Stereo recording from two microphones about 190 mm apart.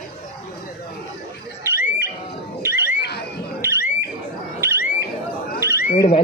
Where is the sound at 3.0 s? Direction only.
60° left (ahead or behind).